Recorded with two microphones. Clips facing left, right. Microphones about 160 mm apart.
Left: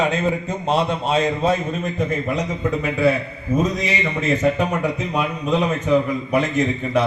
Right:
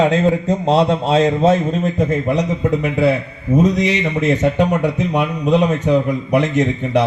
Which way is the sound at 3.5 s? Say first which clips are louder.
Right 6 dB; 75° right (ahead or behind).